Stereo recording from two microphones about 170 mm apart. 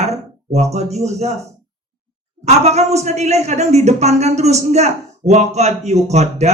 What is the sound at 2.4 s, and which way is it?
Speech, 40° right (ahead or behind).